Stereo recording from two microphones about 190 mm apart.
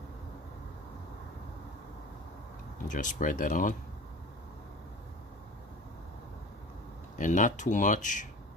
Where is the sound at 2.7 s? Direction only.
40° left (ahead or behind).